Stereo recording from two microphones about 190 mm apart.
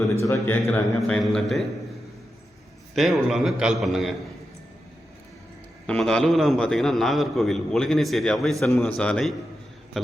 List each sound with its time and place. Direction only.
0.2 s a man's voice: 10° left (ahead or behind)
2.9 s a man's voice: centre (ahead or behind)
5.8 s a man's voice: 5° left (ahead or behind)